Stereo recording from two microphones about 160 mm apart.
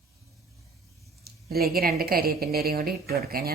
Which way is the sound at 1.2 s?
70° right (ahead or behind).